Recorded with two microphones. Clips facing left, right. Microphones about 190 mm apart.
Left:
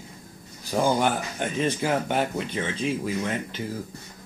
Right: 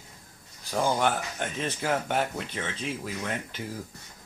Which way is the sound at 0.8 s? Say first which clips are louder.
Left 3 dB; 5° left (ahead or behind).